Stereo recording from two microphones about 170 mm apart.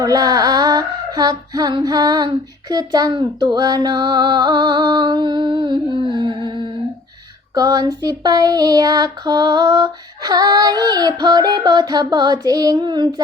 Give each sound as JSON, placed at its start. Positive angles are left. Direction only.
{"t": 0.0, "sound": "female singing", "side_deg": -20}
{"t": 7.5, "sound": "female singing", "side_deg": -20}